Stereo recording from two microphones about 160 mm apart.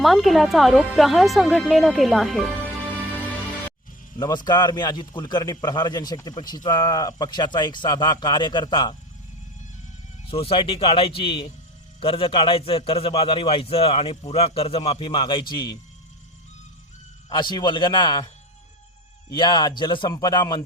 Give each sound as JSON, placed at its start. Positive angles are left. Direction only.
{"t": 0.0, "sound": "speech", "side_deg": 0}
{"t": 4.4, "sound": "a man's voice", "side_deg": 25}
{"t": 10.2, "sound": "a man's voice", "side_deg": 35}
{"t": 17.2, "sound": "a man's voice", "side_deg": 25}
{"t": 19.3, "sound": "a man's voice", "side_deg": 30}